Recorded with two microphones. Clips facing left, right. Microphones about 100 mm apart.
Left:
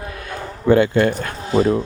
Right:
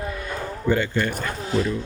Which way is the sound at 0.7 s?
60° left (ahead or behind).